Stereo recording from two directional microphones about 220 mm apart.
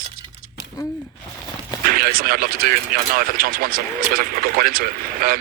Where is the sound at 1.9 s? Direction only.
40° right (ahead or behind).